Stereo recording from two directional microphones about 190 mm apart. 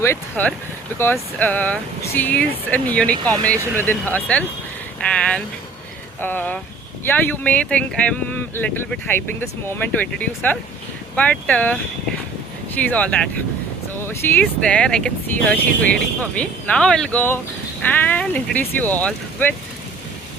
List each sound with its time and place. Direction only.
0.0 s speech: 10° left (ahead or behind)